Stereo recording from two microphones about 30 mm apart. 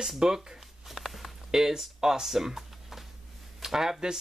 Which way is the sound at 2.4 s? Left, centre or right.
Centre.